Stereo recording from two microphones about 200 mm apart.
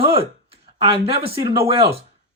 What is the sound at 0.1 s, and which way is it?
Speech, 30° right (ahead or behind).